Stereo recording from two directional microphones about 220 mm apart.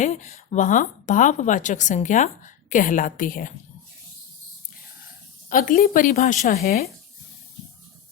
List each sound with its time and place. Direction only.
0.0 s a woman's voice: 30° left (ahead or behind)
5.5 s a woman's voice: 40° left (ahead or behind)